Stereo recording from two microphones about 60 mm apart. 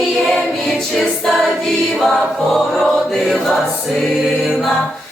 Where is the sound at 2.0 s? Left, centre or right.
Centre.